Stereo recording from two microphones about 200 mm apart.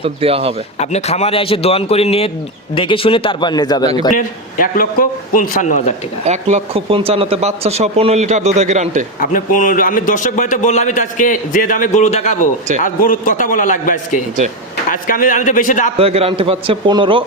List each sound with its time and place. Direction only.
0.0 s a man's voice: 30° right (ahead or behind)
0.8 s a man's voice: 35° left (ahead or behind)
4.1 s a man's voice: 45° left (ahead or behind)
6.2 s speech: 30° right (ahead or behind)
9.2 s a man's voice: 40° left (ahead or behind)
16.0 s a man's voice: 30° right (ahead or behind)